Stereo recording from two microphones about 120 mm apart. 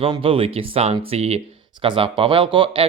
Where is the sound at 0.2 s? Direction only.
50° right (ahead or behind).